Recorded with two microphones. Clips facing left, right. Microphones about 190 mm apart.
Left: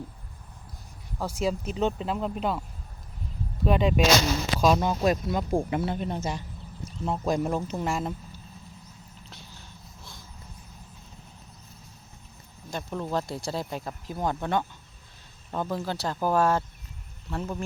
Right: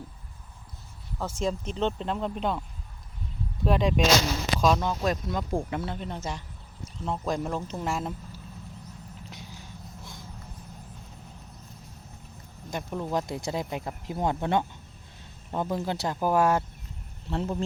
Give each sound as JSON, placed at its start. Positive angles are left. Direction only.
{"t": 1.2, "sound": "speech", "side_deg": 10}
{"t": 9.3, "sound": "vehicle", "side_deg": -15}
{"t": 12.7, "sound": "speech", "side_deg": -15}